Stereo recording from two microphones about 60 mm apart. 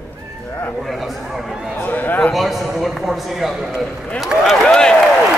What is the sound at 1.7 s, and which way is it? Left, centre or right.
Speech, left.